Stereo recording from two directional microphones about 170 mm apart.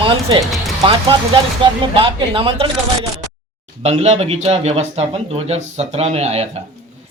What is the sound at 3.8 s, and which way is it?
Speech, 40° right (ahead or behind).